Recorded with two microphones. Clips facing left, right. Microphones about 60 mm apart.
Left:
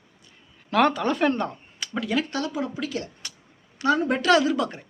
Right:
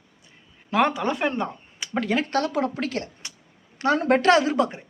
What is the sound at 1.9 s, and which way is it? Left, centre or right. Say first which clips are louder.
Speech: right 3 dB; right.